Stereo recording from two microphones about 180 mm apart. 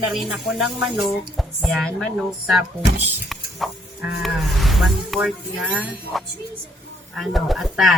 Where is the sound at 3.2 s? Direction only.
Centre (ahead or behind).